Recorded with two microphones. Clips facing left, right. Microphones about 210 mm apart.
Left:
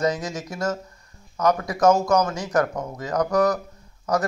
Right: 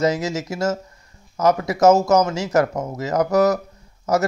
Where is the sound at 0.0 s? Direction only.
25° right (ahead or behind).